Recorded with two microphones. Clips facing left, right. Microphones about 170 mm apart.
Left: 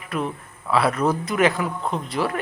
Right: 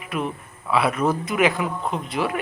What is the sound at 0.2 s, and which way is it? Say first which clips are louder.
A man's voice: even; 10° right (ahead or behind).